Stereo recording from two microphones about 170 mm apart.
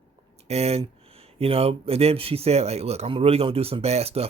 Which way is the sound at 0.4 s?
40° right (ahead or behind).